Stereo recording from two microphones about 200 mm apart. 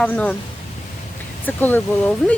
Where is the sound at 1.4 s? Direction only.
10° left (ahead or behind).